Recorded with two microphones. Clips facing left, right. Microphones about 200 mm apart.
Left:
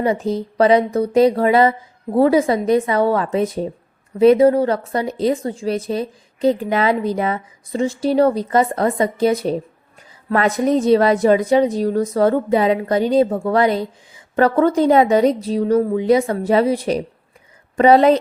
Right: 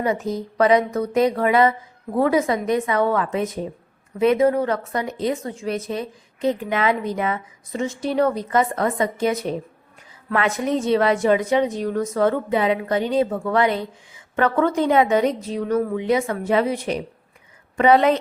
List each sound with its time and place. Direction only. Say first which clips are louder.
0.0 s a woman's voice: left 4 dB; 30° left (ahead or behind)